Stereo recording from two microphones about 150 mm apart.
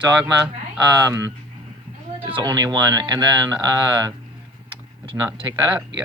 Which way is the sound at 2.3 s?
25° right (ahead or behind).